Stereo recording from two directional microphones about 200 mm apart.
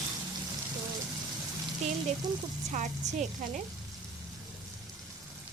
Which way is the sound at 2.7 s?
40° right (ahead or behind).